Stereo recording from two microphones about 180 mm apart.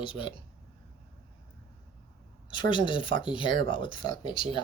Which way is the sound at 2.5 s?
25° left (ahead or behind).